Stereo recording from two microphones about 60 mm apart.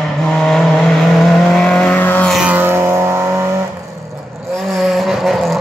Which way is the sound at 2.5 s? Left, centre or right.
Right.